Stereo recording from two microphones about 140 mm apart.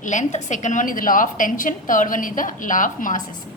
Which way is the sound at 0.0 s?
60° left (ahead or behind).